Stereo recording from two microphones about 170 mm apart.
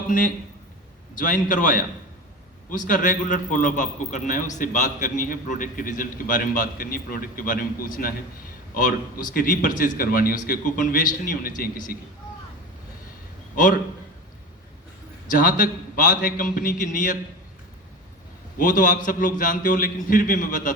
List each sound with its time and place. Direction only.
0.1 s a man's voice: 50° left (ahead or behind)
15.4 s a man's voice: 55° left (ahead or behind)
18.5 s a man's voice: 50° left (ahead or behind)